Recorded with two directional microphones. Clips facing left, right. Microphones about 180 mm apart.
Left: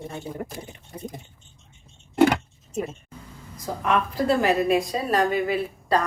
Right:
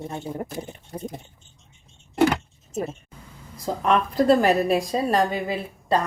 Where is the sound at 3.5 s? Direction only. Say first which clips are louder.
Right 2 dB; 35° right (ahead or behind).